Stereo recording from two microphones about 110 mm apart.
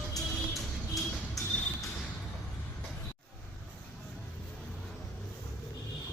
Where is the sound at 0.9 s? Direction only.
30° left (ahead or behind).